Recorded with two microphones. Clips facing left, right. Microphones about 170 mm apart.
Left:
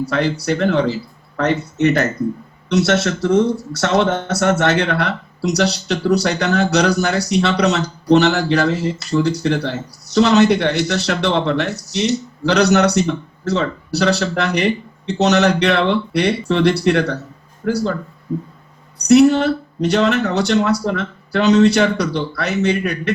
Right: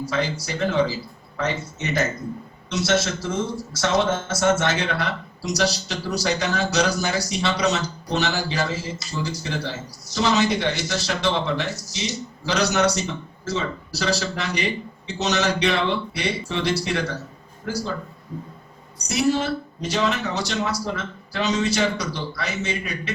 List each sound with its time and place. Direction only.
0.0 s speech: 65° left (ahead or behind)
19.0 s speech: 65° left (ahead or behind)